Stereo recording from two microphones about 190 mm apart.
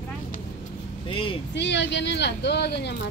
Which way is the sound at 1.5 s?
65° left (ahead or behind).